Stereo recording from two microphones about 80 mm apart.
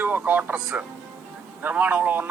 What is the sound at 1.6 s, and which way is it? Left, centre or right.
Speech, centre.